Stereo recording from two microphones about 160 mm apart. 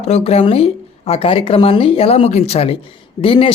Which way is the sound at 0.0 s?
40° left (ahead or behind).